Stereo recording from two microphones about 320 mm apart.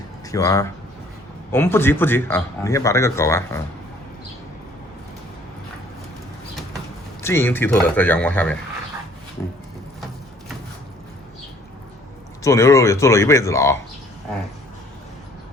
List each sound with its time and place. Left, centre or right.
0.3 s speech: centre
7.2 s a man's voice: centre
12.4 s speech: centre